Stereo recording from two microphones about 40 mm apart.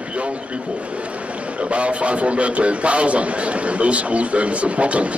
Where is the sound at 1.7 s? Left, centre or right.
Right.